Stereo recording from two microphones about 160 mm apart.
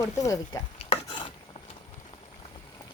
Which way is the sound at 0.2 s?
20° left (ahead or behind).